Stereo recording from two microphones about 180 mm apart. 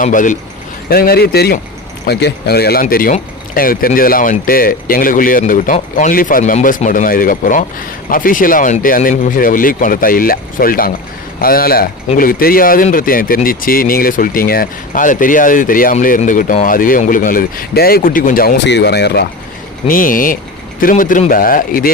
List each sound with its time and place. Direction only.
0.0 s speech: 45° left (ahead or behind)
0.9 s speech: 55° left (ahead or behind)
19.9 s speech: 50° left (ahead or behind)